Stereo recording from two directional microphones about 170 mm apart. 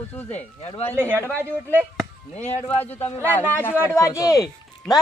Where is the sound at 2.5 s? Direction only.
40° left (ahead or behind).